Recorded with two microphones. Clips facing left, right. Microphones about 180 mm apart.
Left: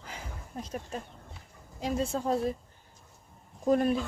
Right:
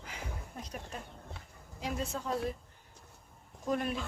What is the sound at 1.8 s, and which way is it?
Speech, 30° left (ahead or behind).